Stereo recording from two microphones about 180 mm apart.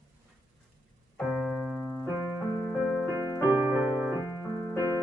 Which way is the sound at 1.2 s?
Centre (ahead or behind).